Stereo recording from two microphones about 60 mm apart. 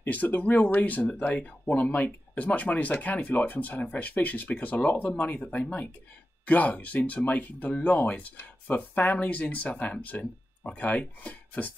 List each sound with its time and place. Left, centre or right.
0.0 s speech: left